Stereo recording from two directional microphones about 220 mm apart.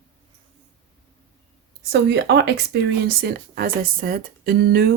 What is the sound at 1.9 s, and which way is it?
Speech, 50° right (ahead or behind).